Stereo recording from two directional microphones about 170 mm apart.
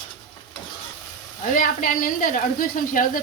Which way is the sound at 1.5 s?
50° left (ahead or behind).